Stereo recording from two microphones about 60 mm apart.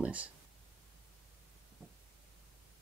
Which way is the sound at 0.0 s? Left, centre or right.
Right.